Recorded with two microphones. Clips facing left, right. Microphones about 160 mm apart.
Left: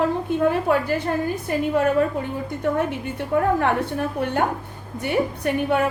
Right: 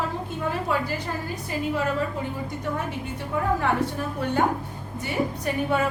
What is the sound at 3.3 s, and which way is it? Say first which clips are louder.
Speech: left 7 dB; 55° left (ahead or behind).